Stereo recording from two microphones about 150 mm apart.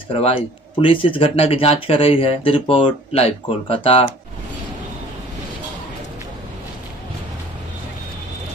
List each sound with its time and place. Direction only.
0.1 s speech: 35° left (ahead or behind)